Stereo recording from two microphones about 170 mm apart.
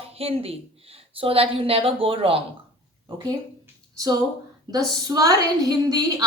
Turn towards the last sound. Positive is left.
turn(degrees=-20)  # may be behind; listen again after turning